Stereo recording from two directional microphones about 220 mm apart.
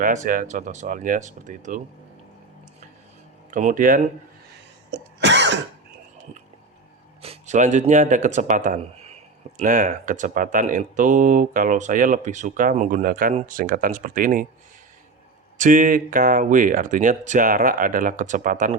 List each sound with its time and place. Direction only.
0.0 s speech: 40° right (ahead or behind)
3.5 s speech: 35° right (ahead or behind)
4.9 s cough: 55° right (ahead or behind)
7.2 s speech: 30° right (ahead or behind)
15.5 s speech: 35° right (ahead or behind)